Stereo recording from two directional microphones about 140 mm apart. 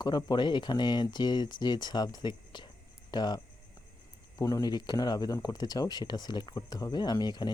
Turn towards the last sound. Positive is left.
turn(degrees=30)  # may be behind; listen again after turning